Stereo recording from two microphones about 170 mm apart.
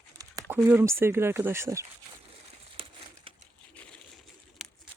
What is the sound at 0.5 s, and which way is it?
Speech, 15° right (ahead or behind).